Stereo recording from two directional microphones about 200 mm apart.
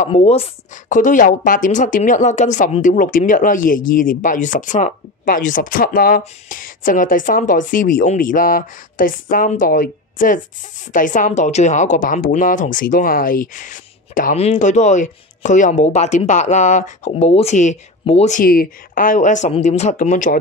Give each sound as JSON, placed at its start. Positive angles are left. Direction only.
{"t": 0.0, "sound": "speech", "side_deg": 30}